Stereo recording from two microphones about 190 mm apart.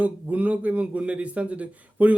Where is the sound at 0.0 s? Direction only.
10° right (ahead or behind).